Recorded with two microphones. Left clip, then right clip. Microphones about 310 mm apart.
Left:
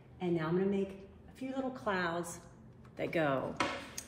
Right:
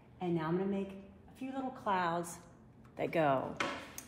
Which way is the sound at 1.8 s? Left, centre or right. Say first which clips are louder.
Right 3 dB; centre.